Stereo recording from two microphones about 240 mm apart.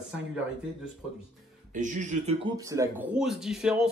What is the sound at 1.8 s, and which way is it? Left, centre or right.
Speech, right.